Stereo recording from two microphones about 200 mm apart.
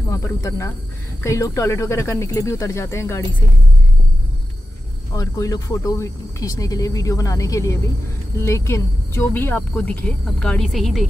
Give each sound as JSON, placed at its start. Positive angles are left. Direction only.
{"t": 0.1, "sound": "speech", "side_deg": 15}
{"t": 5.1, "sound": "speech", "side_deg": 15}